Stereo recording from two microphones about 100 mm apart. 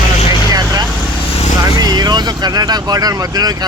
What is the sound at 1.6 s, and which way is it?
Speech, 40° right (ahead or behind).